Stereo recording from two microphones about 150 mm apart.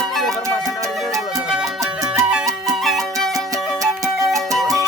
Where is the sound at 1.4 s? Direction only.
5° right (ahead or behind).